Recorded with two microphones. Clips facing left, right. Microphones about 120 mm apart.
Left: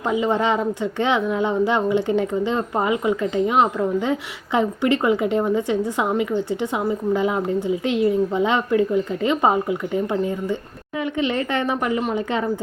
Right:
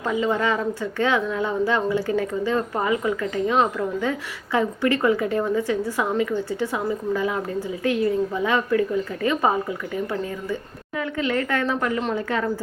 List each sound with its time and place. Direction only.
0.0 s speech: 20° left (ahead or behind)